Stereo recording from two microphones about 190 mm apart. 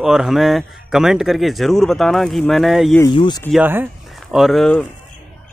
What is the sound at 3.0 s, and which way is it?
Speech, 25° left (ahead or behind).